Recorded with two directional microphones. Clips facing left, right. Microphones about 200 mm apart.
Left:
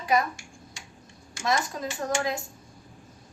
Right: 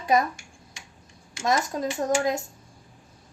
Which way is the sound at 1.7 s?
40° right (ahead or behind).